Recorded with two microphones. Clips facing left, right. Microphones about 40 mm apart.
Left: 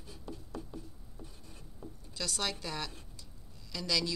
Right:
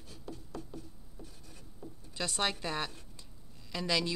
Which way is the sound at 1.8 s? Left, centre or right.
Centre.